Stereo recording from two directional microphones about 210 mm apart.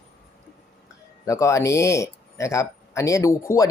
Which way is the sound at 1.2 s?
15° left (ahead or behind).